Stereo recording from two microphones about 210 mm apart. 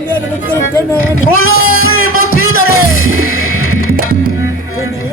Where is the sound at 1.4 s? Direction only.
75° left (ahead or behind).